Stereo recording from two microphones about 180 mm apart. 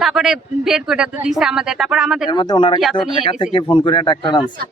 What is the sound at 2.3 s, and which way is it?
Speech, 25° left (ahead or behind).